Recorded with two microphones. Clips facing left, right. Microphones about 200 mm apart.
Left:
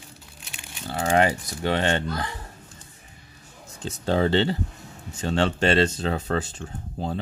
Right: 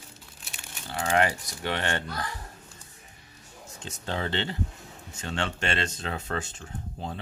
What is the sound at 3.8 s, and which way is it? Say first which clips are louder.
Speech: left 10 dB; 35° left (ahead or behind).